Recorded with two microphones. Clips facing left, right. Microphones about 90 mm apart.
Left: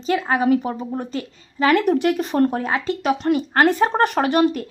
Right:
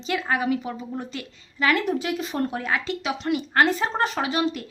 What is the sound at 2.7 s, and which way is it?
Speech, 30° left (ahead or behind).